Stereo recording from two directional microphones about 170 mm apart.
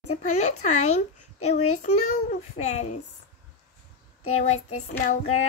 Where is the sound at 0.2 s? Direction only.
45° left (ahead or behind).